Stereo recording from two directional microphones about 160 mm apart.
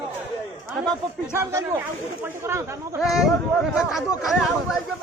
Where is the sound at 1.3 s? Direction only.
20° right (ahead or behind).